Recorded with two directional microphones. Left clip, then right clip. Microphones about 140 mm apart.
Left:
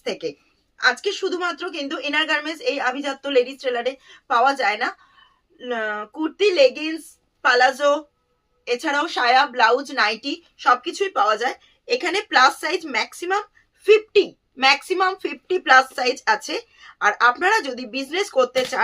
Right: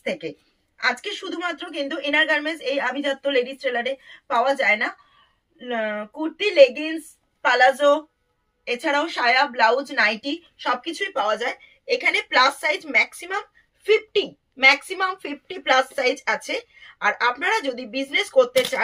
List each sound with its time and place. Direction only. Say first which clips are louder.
1.4 s a woman's voice: left 1 dB; 25° left (ahead or behind); by 18.9 s 40° left (ahead or behind)